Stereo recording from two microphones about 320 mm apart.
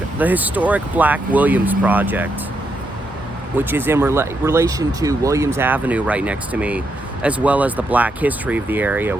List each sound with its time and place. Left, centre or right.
0.2 s speech: centre
3.6 s speech: centre